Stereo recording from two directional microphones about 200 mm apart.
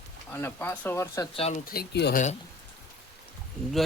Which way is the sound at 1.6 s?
50° left (ahead or behind).